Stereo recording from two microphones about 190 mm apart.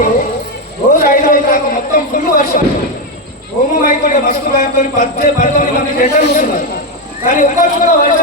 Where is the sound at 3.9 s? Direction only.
45° left (ahead or behind).